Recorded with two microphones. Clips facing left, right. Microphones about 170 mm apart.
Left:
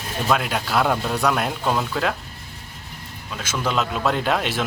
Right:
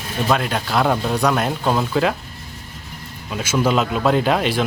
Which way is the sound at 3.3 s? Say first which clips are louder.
Right 7 dB; 10° right (ahead or behind).